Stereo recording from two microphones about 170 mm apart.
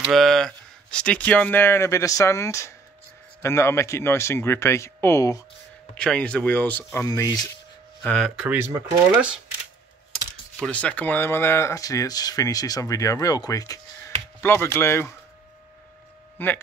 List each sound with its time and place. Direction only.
0.0 s speech: centre (ahead or behind); by 5.4 s 15° left (ahead or behind)
5.9 s speech: 5° left (ahead or behind)
8.0 s speech: 5° left (ahead or behind)
8.4 s speech: 10° right (ahead or behind)
10.6 s speech: 5° left (ahead or behind)
16.3 s speech: 10° left (ahead or behind)